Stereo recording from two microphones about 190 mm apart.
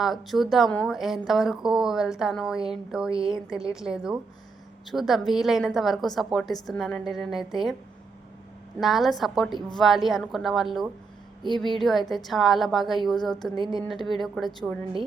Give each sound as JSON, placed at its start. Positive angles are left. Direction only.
{"t": 0.0, "sound": "a woman's voice", "side_deg": 0}
{"t": 8.8, "sound": "a woman's voice", "side_deg": 0}
{"t": 11.4, "sound": "speech", "side_deg": -25}
{"t": 11.8, "sound": "a woman's voice", "side_deg": 0}
{"t": 13.6, "sound": "speech", "side_deg": -25}
{"t": 13.9, "sound": "a woman's voice", "side_deg": 0}